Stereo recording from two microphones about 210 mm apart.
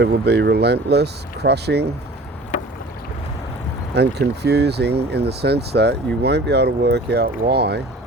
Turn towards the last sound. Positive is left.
turn(degrees=-50)  # may be behind; listen again after turning